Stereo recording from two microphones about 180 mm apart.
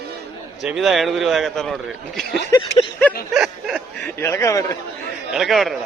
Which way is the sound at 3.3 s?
Centre (ahead or behind).